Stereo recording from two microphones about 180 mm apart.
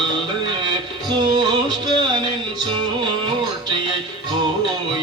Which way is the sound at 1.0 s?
25° right (ahead or behind).